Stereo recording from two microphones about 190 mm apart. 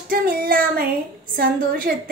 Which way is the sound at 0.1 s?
50° right (ahead or behind).